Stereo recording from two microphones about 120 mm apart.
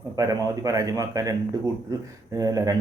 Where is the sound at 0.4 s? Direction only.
30° right (ahead or behind).